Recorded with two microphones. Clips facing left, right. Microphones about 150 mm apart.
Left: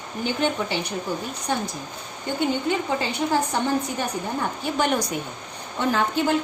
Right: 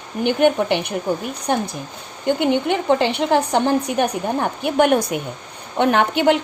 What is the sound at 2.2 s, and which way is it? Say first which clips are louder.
A woman's voice: right 6 dB; 70° right (ahead or behind).